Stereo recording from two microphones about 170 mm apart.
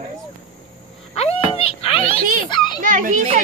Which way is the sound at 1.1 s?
40° left (ahead or behind).